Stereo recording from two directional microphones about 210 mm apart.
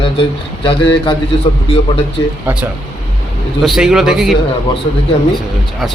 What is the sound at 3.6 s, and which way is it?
Speech, centre (ahead or behind).